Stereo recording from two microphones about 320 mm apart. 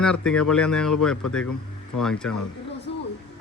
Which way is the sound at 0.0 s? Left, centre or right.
Centre.